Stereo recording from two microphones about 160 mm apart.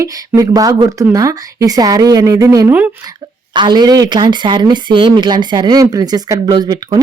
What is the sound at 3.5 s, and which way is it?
Speech, 30° right (ahead or behind).